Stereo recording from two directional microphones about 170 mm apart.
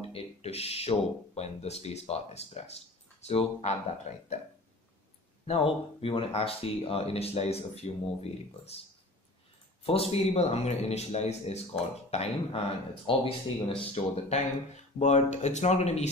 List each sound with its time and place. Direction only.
0.1 s speech: 35° left (ahead or behind)
5.5 s speech: 35° left (ahead or behind)
9.8 s speech: 35° left (ahead or behind)